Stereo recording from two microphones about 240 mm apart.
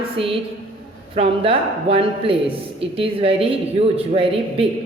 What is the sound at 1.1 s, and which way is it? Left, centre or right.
Speech, right.